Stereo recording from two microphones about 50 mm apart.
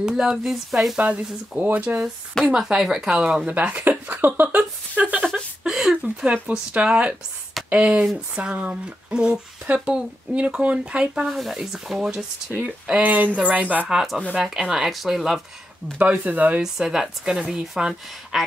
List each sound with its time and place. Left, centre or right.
0.0 s speech: centre
0.5 s sizzle: centre
0.9 s speech: right
2.5 s speech: centre
3.2 s speech: centre
3.5 s speech: right
5.6 s a sound: centre
6.0 s speech: right
11.2 s speech: centre
12.0 s speech: centre
13.0 s speech: right
14.3 s speech: centre
16.0 s speech: right
16.6 s speech: centre